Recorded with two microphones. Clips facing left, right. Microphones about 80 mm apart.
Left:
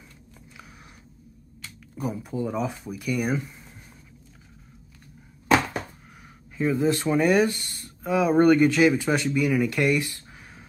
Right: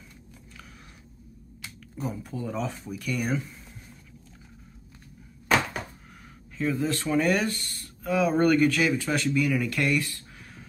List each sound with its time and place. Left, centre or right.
2.0 s speech: centre
6.5 s speech: centre